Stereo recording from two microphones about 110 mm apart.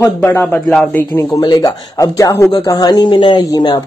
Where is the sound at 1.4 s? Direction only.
40° left (ahead or behind).